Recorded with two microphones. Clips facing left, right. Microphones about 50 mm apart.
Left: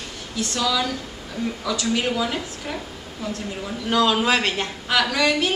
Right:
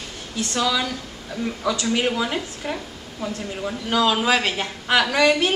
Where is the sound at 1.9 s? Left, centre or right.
Centre.